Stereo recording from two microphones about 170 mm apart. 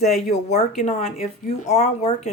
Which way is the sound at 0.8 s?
40° left (ahead or behind).